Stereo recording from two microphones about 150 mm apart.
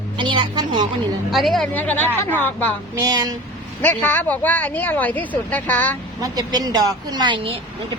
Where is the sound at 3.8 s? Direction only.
10° left (ahead or behind).